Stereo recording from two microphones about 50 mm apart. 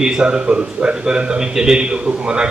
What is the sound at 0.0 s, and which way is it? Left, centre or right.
A man's voice, centre.